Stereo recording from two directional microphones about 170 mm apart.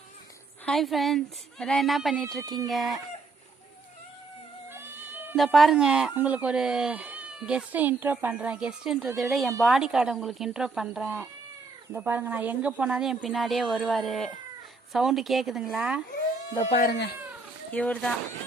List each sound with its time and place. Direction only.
0.6 s speech: centre (ahead or behind)
4.7 s cat: 15° right (ahead or behind)
5.4 s speech: centre (ahead or behind)
16.6 s speech: 40° left (ahead or behind)
16.8 s speech: 70° left (ahead or behind)
17.7 s speech: 10° left (ahead or behind)